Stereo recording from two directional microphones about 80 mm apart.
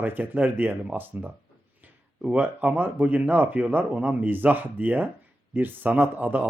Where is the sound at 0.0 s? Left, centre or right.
Right.